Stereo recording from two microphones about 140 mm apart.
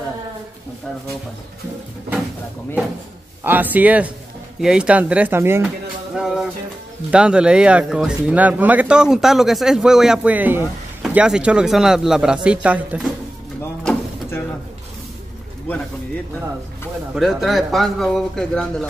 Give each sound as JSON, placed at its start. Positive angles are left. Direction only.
{"t": 3.4, "sound": "speech", "side_deg": -10}
{"t": 6.1, "sound": "music", "side_deg": -5}
{"t": 7.1, "sound": "speech", "side_deg": -5}
{"t": 17.1, "sound": "speech", "side_deg": -5}